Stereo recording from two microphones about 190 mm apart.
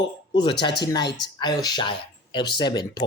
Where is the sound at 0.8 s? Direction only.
20° left (ahead or behind).